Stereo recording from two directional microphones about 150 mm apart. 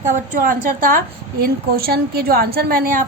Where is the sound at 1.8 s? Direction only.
90° right; by 3.0 s 70° right (ahead or behind).